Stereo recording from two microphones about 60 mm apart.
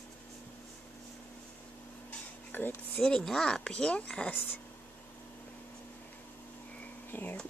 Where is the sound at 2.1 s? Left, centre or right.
Left.